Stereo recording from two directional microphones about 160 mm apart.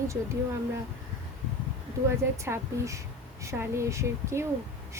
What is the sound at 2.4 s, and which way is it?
A woman's voice, 20° right (ahead or behind).